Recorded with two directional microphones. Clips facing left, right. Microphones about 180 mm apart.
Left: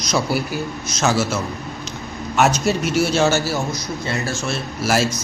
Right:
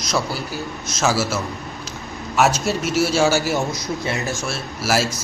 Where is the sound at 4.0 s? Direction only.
20° right (ahead or behind).